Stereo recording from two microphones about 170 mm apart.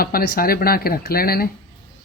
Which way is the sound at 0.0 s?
60° left (ahead or behind).